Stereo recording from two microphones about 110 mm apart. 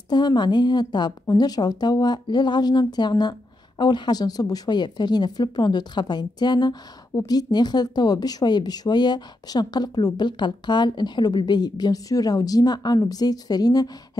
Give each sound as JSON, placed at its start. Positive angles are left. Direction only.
{"t": 0.1, "sound": "speech", "side_deg": 40}